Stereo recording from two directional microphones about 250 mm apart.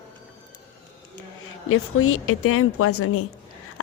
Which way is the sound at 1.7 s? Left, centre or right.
Left.